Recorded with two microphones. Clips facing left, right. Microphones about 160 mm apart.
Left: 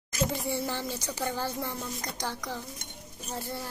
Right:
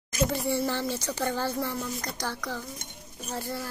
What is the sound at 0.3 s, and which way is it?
Speech, 15° left (ahead or behind).